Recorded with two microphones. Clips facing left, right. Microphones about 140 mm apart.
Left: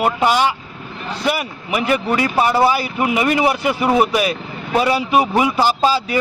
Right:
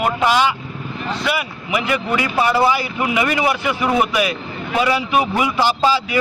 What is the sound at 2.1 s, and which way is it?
Speech, 40° left (ahead or behind).